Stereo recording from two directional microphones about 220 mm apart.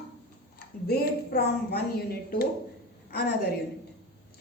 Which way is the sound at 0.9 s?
45° left (ahead or behind).